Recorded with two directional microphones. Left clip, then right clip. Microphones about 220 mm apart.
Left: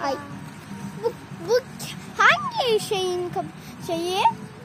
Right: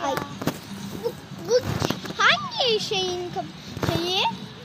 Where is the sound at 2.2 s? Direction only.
60° left (ahead or behind).